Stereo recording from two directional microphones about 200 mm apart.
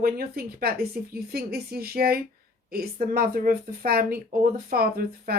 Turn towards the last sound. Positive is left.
turn(degrees=-50)  # may be behind; listen again after turning